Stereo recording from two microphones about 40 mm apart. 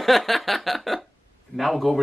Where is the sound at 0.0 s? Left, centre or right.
Centre.